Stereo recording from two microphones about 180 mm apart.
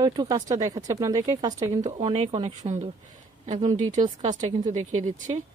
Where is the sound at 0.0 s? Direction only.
20° right (ahead or behind).